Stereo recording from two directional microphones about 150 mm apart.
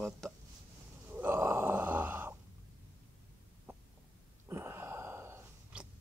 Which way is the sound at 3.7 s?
15° right (ahead or behind).